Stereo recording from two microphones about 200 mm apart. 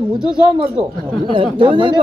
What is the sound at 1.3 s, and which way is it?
Speech, 25° right (ahead or behind).